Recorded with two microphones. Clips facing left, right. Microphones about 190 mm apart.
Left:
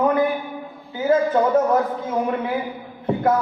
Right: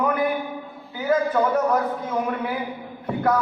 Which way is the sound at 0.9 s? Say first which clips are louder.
Left 3 dB; 25° left (ahead or behind).